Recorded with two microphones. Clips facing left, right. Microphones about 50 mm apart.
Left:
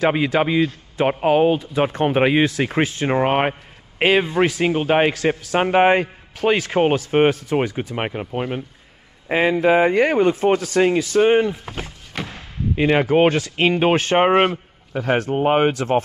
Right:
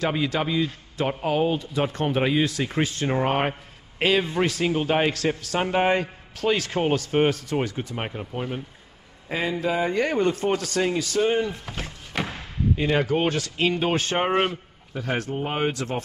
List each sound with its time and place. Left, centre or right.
0.0 s a man's voice: left
5.1 s a man's voice: centre
5.6 s a man's voice: left
6.3 s a man's voice: left
7.9 s a man's voice: left
10.8 s a man's voice: left
11.8 s a sound: centre
12.7 s a man's voice: left